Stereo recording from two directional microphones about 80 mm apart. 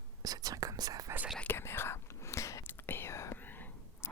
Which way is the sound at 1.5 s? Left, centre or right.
Left.